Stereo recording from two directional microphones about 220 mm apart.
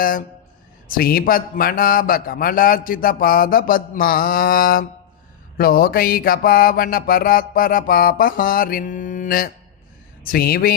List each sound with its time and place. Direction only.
0.0 s a man's voice: 40° left (ahead or behind)